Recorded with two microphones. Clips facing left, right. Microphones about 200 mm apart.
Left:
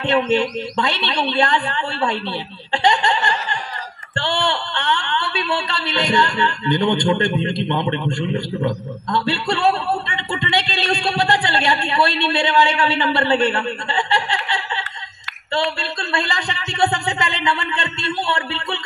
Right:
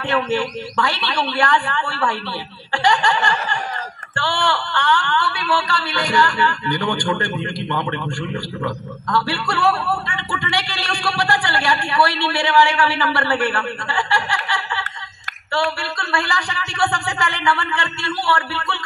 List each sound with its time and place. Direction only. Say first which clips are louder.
0.0 s a man's voice: left 3 dB; 20° left (ahead or behind)
15.8 s a man's voice: even; 20° left (ahead or behind)